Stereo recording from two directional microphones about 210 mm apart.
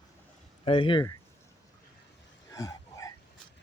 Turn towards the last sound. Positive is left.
turn(degrees=15)  # may be behind; listen again after turning